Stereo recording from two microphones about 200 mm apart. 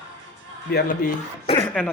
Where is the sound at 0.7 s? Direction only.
45° left (ahead or behind).